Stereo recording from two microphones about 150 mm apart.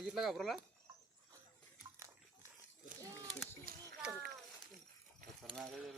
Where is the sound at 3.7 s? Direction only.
75° right (ahead or behind).